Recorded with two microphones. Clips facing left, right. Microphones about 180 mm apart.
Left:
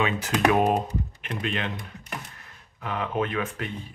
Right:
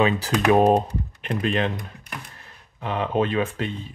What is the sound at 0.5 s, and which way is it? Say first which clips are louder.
Speech: right 5 dB; 30° right (ahead or behind).